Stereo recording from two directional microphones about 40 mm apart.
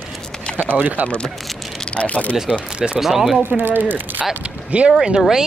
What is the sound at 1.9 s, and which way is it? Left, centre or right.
Speech, left.